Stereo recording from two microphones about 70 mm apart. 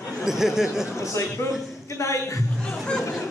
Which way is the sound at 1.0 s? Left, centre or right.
Left.